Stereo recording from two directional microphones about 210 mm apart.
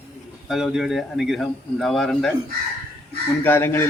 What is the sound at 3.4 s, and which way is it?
Speech, 10° left (ahead or behind).